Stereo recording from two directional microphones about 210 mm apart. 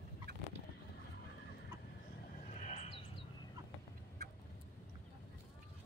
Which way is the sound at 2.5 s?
35° left (ahead or behind).